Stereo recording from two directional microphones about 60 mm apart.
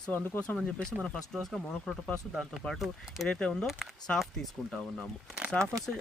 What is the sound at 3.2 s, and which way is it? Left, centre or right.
Speech, centre.